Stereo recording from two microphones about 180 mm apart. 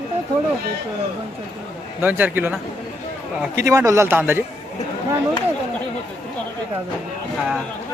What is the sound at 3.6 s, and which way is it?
Speech, 15° right (ahead or behind).